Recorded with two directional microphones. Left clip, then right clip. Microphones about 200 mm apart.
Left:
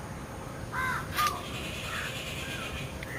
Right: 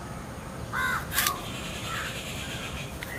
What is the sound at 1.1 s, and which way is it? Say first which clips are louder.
Crow: right 1 dB; 55° right (ahead or behind).